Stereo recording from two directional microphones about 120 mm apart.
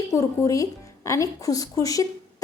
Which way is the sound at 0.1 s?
25° left (ahead or behind).